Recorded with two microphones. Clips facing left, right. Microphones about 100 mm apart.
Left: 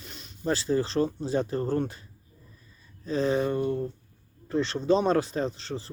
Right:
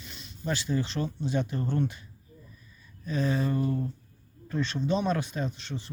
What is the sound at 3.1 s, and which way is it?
Speech, 30° left (ahead or behind).